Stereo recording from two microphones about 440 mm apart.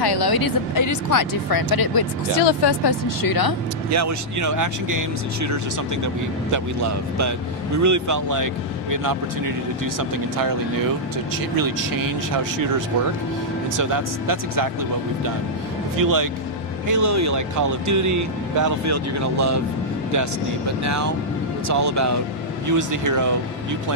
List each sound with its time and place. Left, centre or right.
0.0 s speech: left
3.9 s speech: right
9.9 s speech: right
11.5 s speech: right
13.7 s speech: right
16.0 s speech: right
21.6 s speech: right